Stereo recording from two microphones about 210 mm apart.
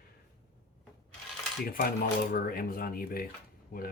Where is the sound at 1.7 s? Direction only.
45° left (ahead or behind).